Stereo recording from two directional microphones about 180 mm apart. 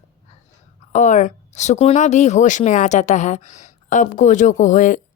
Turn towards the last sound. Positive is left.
turn(degrees=45)  # may be behind; listen again after turning